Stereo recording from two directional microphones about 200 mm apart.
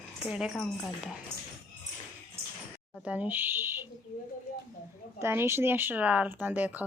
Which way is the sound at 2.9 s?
5° right (ahead or behind).